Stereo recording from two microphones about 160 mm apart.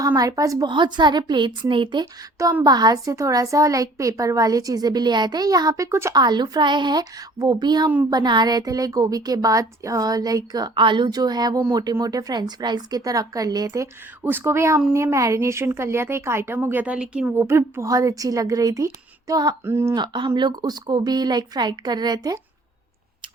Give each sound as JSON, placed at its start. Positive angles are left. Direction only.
{"t": 0.0, "sound": "a woman's voice", "side_deg": -20}
{"t": 20.0, "sound": "a woman's voice", "side_deg": -30}